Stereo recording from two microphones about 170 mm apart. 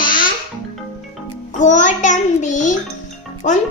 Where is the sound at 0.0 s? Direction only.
55° left (ahead or behind).